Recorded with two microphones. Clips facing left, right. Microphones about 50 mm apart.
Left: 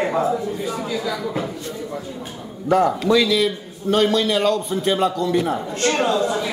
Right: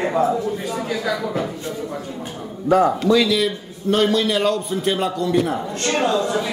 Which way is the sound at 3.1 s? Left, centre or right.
Centre.